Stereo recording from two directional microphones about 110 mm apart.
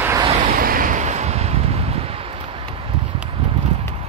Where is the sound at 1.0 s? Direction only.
90° right; by 2.2 s 65° right (ahead or behind).